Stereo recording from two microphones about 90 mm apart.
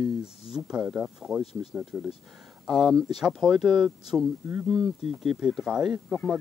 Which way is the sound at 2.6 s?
Centre (ahead or behind).